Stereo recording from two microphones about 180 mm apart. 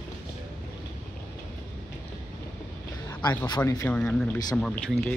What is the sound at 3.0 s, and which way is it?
Speech, 25° left (ahead or behind).